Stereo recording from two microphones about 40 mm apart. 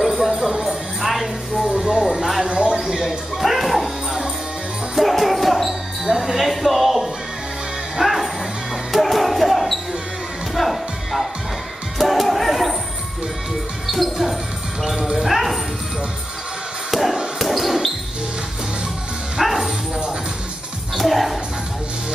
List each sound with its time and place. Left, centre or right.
0.0 s music: centre
1.0 s music: centre
1.8 s music: centre
2.4 s a sound: right
2.8 s music: centre
4.9 s basketball bounce: centre
6.0 s music: centre
8.9 s basketball bounce: centre
10.5 s music: centre
13.8 s music: centre
16.9 s chop: centre
17.4 s a sound: centre
19.3 s bow-wow: centre
21.0 s music: centre